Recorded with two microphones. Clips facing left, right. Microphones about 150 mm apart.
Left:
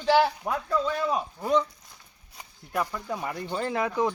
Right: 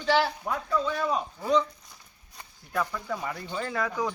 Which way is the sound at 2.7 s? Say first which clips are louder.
Left 1 dB; 15° left (ahead or behind).